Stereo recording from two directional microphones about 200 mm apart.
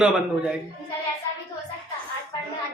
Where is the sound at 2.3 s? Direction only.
25° left (ahead or behind).